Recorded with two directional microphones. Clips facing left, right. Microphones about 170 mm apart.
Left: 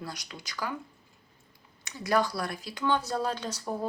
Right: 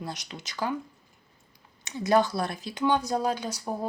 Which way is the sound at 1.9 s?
25° right (ahead or behind).